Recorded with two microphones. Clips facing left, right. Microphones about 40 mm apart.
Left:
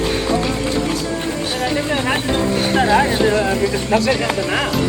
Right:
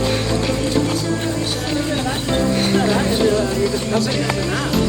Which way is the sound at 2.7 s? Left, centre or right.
Left.